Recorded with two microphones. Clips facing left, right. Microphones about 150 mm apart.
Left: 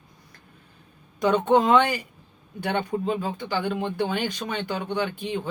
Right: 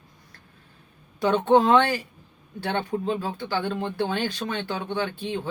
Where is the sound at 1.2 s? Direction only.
15° left (ahead or behind).